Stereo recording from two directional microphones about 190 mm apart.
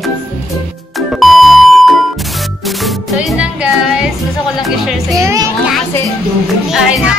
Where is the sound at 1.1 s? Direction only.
Centre (ahead or behind).